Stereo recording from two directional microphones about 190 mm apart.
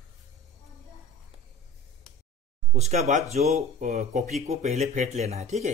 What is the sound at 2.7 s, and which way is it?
Speech, 35° right (ahead or behind).